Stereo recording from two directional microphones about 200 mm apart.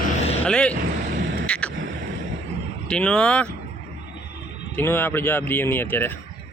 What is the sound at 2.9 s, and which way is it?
Speech, 5° left (ahead or behind).